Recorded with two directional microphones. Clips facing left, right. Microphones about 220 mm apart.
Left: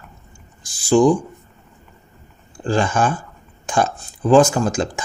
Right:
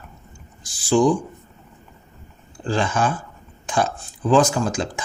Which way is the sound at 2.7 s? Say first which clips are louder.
Left 3 dB; 45° left (ahead or behind).